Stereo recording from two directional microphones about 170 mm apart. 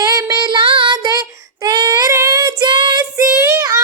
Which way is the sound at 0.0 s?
20° right (ahead or behind).